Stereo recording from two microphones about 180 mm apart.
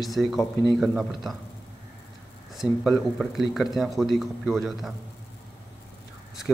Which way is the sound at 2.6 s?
Centre (ahead or behind).